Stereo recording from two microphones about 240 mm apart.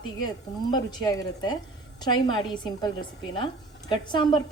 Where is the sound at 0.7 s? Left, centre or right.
Centre.